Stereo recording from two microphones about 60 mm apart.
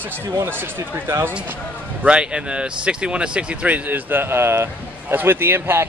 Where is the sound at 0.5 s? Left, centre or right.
Right.